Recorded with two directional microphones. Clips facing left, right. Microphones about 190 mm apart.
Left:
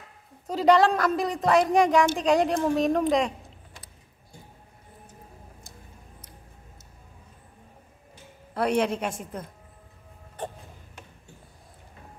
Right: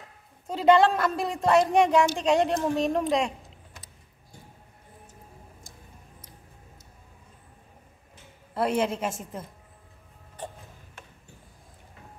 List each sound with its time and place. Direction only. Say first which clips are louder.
0.5 s speech: even; centre (ahead or behind)
8.5 s speech: left 1 dB; centre (ahead or behind)
10.4 s music: left 4 dB; 60° left (ahead or behind)